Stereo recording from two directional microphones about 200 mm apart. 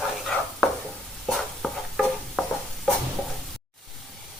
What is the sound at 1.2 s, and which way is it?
Stir, centre (ahead or behind).